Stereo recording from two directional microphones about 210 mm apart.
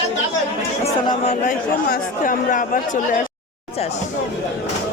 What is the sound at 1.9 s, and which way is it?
Speech, 40° left (ahead or behind).